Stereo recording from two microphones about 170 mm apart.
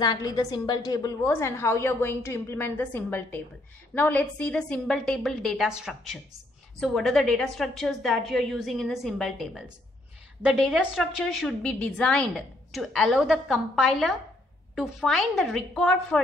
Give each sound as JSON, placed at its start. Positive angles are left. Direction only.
{"t": 0.0, "sound": "a woman's voice", "side_deg": 25}